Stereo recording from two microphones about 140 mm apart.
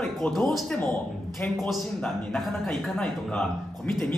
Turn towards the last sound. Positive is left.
turn(degrees=10)  # may be behind; listen again after turning